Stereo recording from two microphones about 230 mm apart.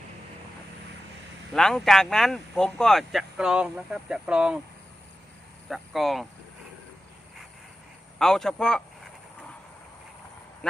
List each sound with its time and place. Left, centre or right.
1.5 s speech: centre
5.6 s speech: centre
8.2 s speech: centre